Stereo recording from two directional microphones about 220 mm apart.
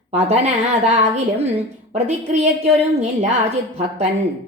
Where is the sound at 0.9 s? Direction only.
30° right (ahead or behind).